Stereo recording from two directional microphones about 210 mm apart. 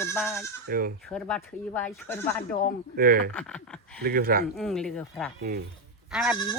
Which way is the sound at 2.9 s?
45° right (ahead or behind).